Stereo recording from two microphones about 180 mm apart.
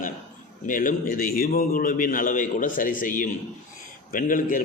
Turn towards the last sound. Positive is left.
turn(degrees=50)  # may be behind; listen again after turning